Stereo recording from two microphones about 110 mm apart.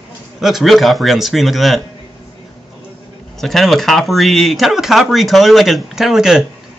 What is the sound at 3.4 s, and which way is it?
Speech, centre (ahead or behind).